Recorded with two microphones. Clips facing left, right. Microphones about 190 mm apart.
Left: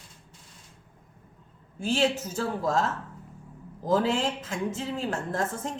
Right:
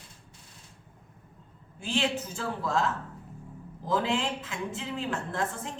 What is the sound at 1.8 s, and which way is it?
A woman's voice, 40° left (ahead or behind).